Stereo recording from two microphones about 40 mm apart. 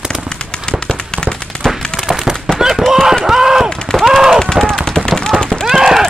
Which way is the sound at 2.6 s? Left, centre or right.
Centre.